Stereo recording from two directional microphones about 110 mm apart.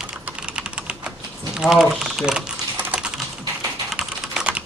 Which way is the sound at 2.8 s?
15° right (ahead or behind).